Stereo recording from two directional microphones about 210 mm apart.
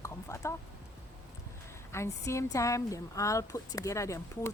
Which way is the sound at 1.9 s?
15° left (ahead or behind).